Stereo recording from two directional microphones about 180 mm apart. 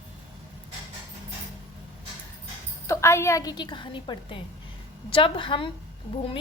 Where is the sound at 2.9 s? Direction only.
15° left (ahead or behind).